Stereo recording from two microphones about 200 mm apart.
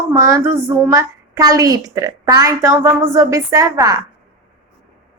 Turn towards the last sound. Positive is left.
turn(degrees=-15)  # may be behind; listen again after turning